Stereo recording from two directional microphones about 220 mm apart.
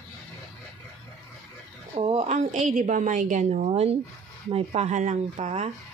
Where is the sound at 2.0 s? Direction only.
30° right (ahead or behind).